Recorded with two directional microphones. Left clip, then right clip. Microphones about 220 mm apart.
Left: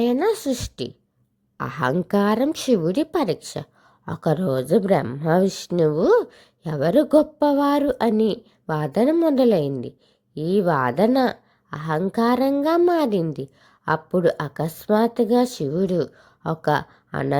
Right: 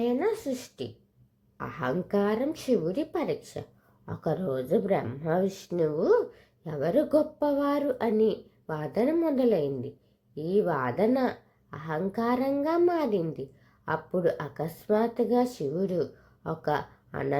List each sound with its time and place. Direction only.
0.0 s a woman's voice: 40° left (ahead or behind)